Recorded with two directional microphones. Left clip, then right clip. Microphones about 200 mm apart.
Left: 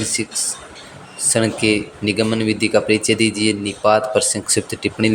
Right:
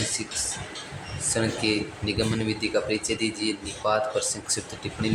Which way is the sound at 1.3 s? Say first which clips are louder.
Left 9 dB; 35° left (ahead or behind).